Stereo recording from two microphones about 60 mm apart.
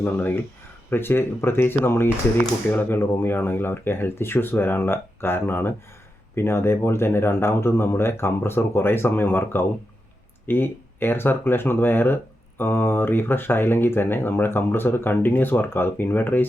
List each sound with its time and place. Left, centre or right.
0.0 s speech: left